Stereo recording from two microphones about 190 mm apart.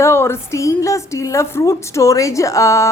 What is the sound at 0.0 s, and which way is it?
A woman's voice, 15° left (ahead or behind).